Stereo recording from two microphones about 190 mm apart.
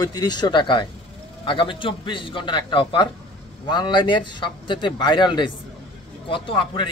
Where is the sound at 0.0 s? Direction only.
20° left (ahead or behind).